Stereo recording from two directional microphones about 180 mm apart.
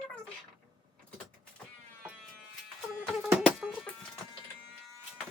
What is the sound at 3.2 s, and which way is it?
Music, centre (ahead or behind).